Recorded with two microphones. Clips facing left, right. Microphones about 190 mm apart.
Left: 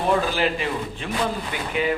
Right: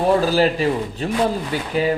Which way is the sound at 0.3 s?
40° right (ahead or behind).